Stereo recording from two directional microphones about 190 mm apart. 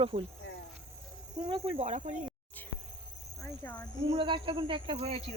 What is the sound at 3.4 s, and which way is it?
Speech, 10° left (ahead or behind).